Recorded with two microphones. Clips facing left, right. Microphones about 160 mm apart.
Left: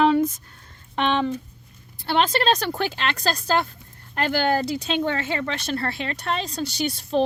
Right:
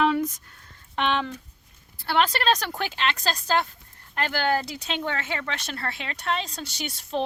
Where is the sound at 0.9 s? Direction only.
20° left (ahead or behind).